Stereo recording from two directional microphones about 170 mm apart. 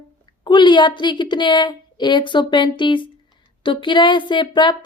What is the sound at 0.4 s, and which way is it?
A woman's voice, 25° left (ahead or behind).